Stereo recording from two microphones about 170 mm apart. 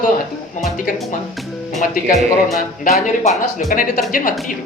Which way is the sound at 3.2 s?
45° left (ahead or behind).